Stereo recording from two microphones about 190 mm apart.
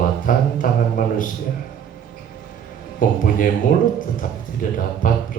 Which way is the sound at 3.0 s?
45° left (ahead or behind).